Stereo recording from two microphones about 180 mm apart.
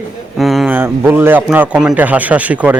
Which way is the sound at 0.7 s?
10° right (ahead or behind).